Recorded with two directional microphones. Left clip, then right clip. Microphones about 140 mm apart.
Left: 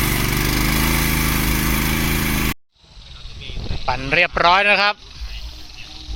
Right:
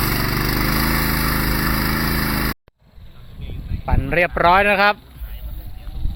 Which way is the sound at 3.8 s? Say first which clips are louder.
Left 2 dB; 15° right (ahead or behind).